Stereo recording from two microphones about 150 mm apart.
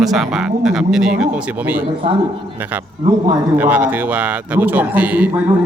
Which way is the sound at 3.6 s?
10° right (ahead or behind).